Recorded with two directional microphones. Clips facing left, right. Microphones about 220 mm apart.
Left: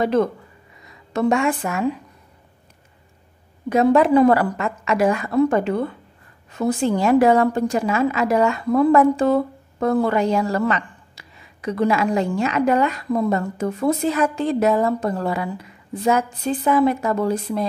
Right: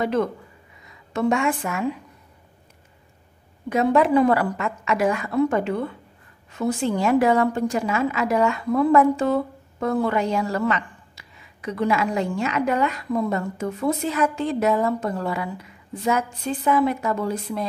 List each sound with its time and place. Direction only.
0.0 s a woman's voice: 35° left (ahead or behind)
3.7 s a woman's voice: 40° left (ahead or behind)